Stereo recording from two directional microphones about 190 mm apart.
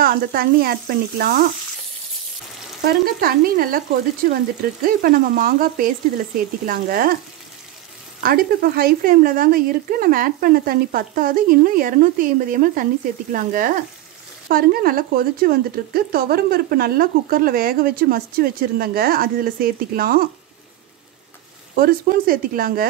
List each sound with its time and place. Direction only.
0.0 s speech: 50° right (ahead or behind)
2.8 s speech: 55° right (ahead or behind)
8.2 s speech: 50° right (ahead or behind)
21.7 s speech: 50° right (ahead or behind)